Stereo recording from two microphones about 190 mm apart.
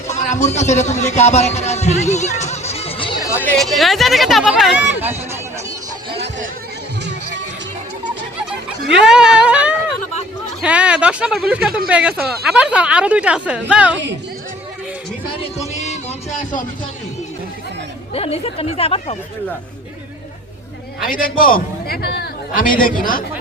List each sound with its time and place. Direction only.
0.1 s speech: 40° left (ahead or behind); by 5.1 s 10° right (ahead or behind)
6.1 s a sound: 65° right (ahead or behind)
7.0 s music: 65° right (ahead or behind)
9.0 s a sound: 5° right (ahead or behind)
10.6 s speech: 5° right (ahead or behind)
15.5 s music: 35° left (ahead or behind)
18.1 s speech: 30° left (ahead or behind)
21.1 s a man's voice: 45° left (ahead or behind)